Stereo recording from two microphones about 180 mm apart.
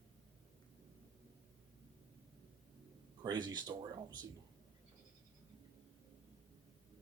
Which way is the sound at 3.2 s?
25° right (ahead or behind).